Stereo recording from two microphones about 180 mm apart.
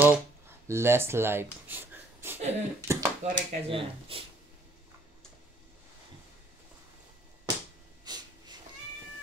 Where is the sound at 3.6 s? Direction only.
30° right (ahead or behind).